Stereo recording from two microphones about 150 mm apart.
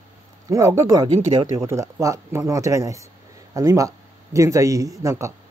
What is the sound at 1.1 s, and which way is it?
Speech, 40° right (ahead or behind).